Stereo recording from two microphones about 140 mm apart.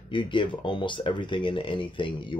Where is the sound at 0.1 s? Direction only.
35° left (ahead or behind).